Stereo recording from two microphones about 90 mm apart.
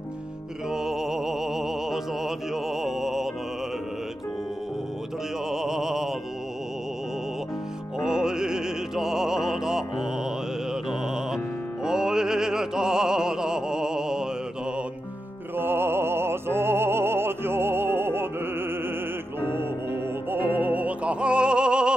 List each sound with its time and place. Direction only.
0.7 s music: 5° right (ahead or behind)
5.5 s music: 5° right (ahead or behind)
8.0 s opera: 5° right (ahead or behind)
10.7 s music: 5° right (ahead or behind)
15.5 s music: 25° right (ahead or behind)
20.2 s music: 20° right (ahead or behind)